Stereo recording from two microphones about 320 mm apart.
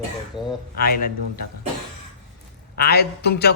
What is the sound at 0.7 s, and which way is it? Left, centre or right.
Speech, left.